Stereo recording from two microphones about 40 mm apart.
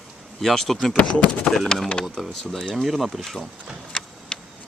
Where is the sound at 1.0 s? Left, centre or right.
Left.